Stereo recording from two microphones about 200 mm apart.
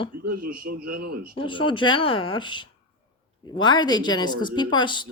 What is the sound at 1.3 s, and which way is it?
Speech, 25° left (ahead or behind).